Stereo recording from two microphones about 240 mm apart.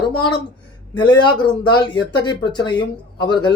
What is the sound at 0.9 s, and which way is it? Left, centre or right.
Speech, centre.